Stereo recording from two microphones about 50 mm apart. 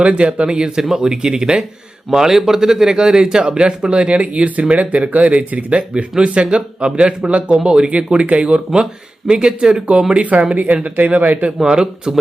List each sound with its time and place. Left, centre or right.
0.0 s speech: right
10.8 s speech: right
11.5 s speech: centre